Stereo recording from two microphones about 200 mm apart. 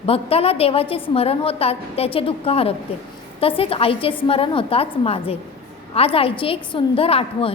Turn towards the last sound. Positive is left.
turn(degrees=30)  # may be behind; listen again after turning